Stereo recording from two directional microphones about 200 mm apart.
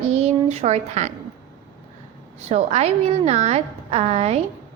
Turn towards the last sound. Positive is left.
turn(degrees=-35)  # may be behind; listen again after turning